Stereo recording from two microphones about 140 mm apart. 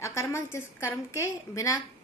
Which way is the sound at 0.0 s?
20° left (ahead or behind).